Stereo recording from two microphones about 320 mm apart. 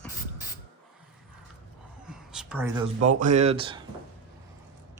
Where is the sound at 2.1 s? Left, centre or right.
Centre.